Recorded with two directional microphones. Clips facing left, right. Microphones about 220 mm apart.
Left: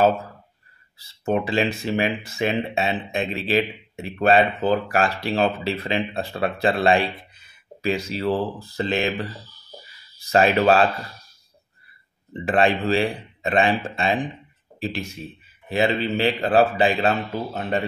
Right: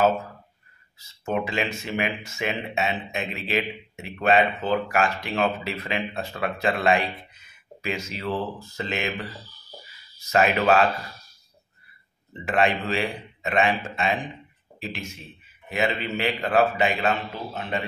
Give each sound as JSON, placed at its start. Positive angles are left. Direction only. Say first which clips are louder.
{"t": 0.9, "sound": "speech", "louder": "left 4 dB", "side_deg": 35}
{"t": 12.4, "sound": "speech", "louder": "left 4 dB", "side_deg": 35}